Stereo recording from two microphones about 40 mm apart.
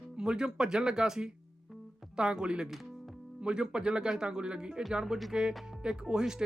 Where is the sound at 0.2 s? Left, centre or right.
Centre.